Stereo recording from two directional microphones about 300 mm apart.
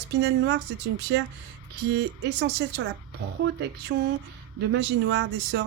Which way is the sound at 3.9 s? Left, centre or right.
Right.